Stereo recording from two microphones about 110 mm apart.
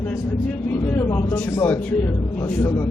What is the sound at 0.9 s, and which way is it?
Speech, 25° left (ahead or behind).